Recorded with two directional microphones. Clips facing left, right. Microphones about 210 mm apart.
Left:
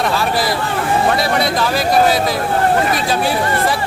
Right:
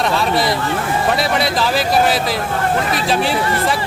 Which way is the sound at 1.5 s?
Centre (ahead or behind).